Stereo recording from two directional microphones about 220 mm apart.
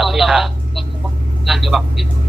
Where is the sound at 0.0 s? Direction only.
Centre (ahead or behind).